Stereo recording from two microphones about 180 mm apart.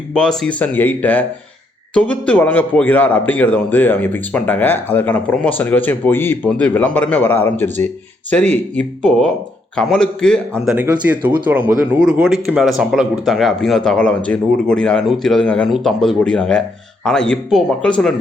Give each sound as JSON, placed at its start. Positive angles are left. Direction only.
{"t": 0.1, "sound": "a man's voice", "side_deg": 5}
{"t": 11.1, "sound": "speech", "side_deg": -10}